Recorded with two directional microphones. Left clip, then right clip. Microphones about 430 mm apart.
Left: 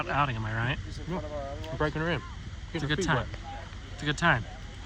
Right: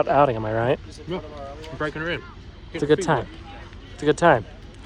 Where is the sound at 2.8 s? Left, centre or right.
Centre.